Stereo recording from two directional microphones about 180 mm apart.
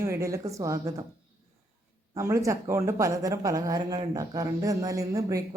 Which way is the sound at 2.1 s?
15° right (ahead or behind).